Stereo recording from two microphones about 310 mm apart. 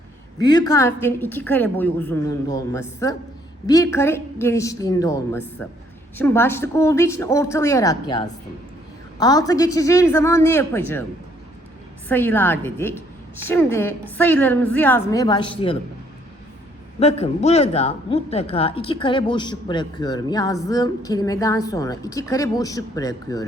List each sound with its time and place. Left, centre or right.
0.4 s speech: centre
12.0 s a woman's voice: centre
17.0 s speech: centre